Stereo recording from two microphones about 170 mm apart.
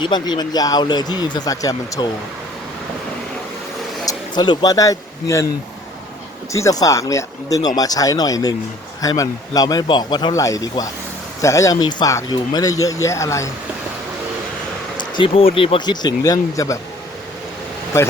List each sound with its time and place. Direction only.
0.0 s speech: 25° left (ahead or behind)
4.0 s speech: 20° left (ahead or behind)
6.5 s speech: 20° left (ahead or behind)
14.9 s a sound: 30° left (ahead or behind)
15.5 s speech: 30° left (ahead or behind)